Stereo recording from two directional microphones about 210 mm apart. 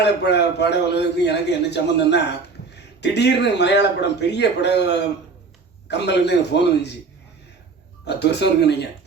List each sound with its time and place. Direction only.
0.0 s a man's voice: 55° left (ahead or behind)
8.0 s a man's voice: 55° left (ahead or behind)